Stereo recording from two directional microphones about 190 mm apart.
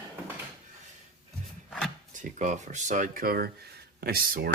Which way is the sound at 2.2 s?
40° right (ahead or behind).